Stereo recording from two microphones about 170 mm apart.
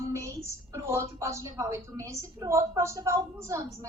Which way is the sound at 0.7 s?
15° right (ahead or behind).